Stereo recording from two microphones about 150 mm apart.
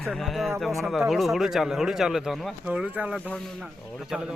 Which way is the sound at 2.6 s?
10° right (ahead or behind).